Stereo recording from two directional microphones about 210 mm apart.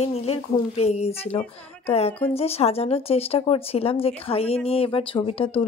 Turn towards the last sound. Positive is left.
turn(degrees=25)  # may be behind; listen again after turning